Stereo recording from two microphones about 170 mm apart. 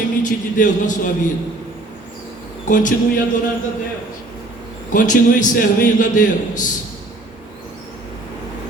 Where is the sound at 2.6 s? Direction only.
50° left (ahead or behind).